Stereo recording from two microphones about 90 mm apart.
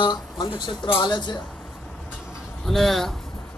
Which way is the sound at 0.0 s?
60° left (ahead or behind).